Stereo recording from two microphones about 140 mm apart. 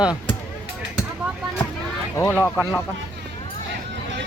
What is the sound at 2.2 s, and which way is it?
Speech, 15° left (ahead or behind).